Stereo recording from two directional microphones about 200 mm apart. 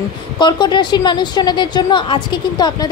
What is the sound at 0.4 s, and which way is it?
A woman's voice, 20° left (ahead or behind).